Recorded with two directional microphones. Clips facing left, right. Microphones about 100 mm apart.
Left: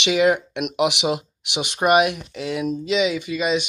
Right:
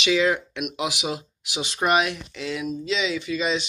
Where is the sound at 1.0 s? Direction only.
20° left (ahead or behind).